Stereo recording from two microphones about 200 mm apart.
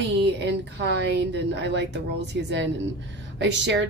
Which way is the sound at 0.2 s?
60° right (ahead or behind).